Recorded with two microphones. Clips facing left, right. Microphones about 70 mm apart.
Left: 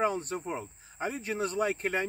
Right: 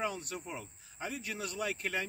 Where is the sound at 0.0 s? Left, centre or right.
Left.